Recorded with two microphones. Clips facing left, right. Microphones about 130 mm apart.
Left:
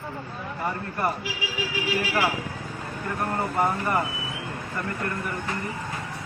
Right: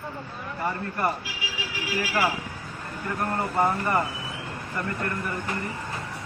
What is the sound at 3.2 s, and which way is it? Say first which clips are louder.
Speech: even; 10° left (ahead or behind).